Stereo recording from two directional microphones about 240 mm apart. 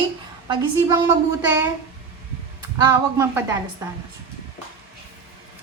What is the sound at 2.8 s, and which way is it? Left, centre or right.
Speech, centre.